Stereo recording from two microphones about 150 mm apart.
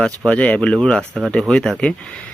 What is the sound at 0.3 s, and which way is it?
Speech, 10° left (ahead or behind).